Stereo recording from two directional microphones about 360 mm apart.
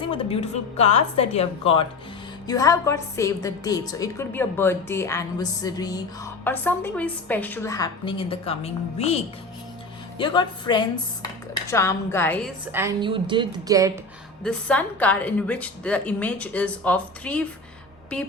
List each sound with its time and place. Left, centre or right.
0.1 s a woman's voice: centre
14.4 s speech: centre